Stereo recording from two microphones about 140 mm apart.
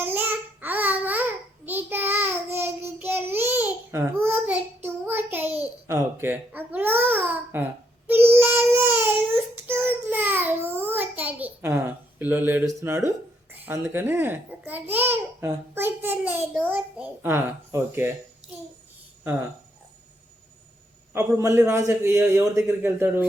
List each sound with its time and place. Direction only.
0.0 s babbling: 15° right (ahead or behind)
1.6 s child singing: 15° right (ahead or behind)
13.5 s a child's voice: 20° right (ahead or behind)
21.1 s a man's voice: 20° right (ahead or behind)